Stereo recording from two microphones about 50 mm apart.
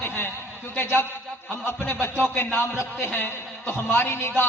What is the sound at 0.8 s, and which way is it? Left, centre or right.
A man's voice, left.